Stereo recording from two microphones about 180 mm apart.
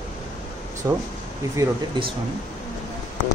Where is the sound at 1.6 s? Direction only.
30° right (ahead or behind).